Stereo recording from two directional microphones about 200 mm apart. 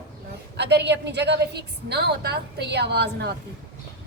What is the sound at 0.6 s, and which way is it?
A woman's voice, 55° right (ahead or behind).